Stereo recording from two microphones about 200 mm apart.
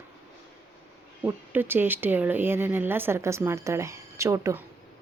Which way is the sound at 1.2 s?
10° right (ahead or behind).